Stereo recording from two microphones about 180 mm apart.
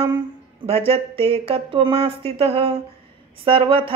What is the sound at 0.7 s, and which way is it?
Speech, 30° right (ahead or behind).